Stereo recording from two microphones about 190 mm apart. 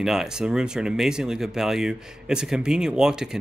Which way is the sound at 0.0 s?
Centre (ahead or behind).